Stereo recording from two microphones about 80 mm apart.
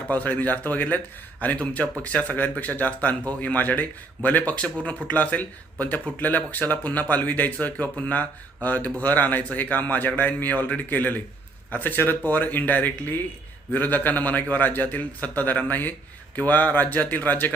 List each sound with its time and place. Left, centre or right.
0.1 s speech: left